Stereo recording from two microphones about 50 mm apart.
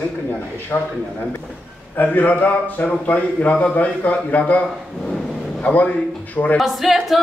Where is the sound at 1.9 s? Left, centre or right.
Left.